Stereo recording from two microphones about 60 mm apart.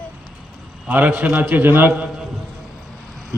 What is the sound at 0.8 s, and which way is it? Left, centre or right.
A man's voice, right.